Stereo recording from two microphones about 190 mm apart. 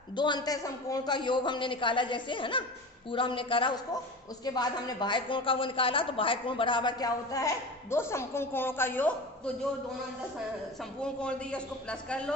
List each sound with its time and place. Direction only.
0.2 s a woman's voice: 20° left (ahead or behind)
11.0 s a man's voice: 5° left (ahead or behind)